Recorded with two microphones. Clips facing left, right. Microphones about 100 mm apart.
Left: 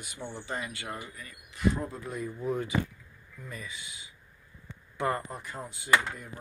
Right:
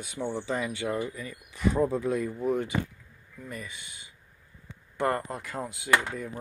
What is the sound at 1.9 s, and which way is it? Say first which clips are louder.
Speech: right 8 dB; 90° right.